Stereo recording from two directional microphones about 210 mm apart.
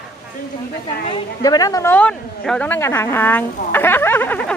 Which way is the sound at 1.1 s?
20° left (ahead or behind).